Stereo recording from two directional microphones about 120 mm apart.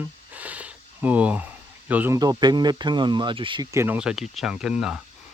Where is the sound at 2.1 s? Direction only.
30° right (ahead or behind).